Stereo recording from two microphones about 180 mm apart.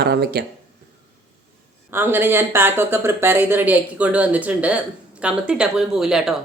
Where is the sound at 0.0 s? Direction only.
60° right (ahead or behind).